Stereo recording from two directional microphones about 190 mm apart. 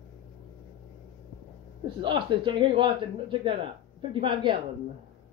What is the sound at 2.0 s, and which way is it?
Speech, 25° right (ahead or behind).